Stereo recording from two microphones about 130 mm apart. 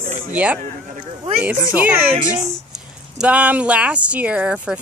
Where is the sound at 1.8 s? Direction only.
15° right (ahead or behind).